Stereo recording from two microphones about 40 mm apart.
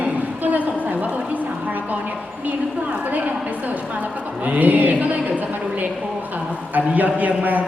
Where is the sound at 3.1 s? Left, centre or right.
Right.